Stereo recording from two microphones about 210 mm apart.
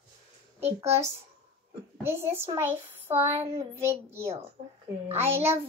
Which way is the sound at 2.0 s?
10° right (ahead or behind).